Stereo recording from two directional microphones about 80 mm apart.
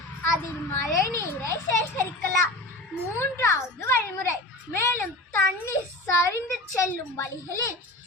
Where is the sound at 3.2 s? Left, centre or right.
Left.